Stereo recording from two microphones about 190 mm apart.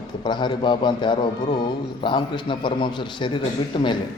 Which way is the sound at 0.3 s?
25° left (ahead or behind).